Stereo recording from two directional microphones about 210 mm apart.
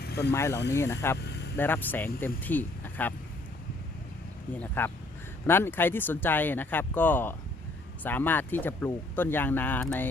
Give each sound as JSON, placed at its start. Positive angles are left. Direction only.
{"t": 0.3, "sound": "speech", "side_deg": 15}
{"t": 4.6, "sound": "speech", "side_deg": 10}